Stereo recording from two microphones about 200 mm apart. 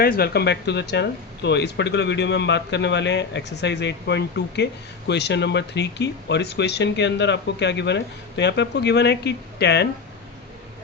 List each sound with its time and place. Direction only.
0.0 s speech: 50° left (ahead or behind)